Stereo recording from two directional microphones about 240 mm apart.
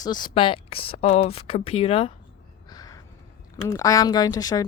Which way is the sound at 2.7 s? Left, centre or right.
Centre.